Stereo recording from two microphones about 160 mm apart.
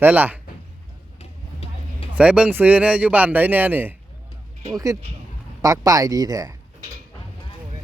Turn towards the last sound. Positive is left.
turn(degrees=-20)  # may be behind; listen again after turning